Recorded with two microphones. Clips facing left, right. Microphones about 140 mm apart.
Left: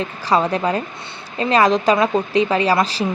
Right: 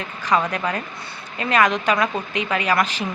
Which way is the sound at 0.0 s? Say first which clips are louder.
Left 3 dB; 30° left (ahead or behind).